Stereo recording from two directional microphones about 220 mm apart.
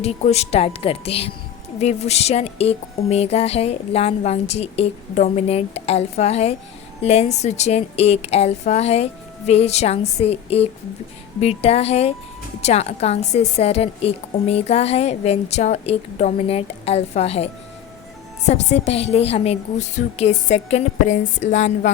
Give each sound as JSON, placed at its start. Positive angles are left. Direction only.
{"t": 0.0, "sound": "a woman's voice", "side_deg": 30}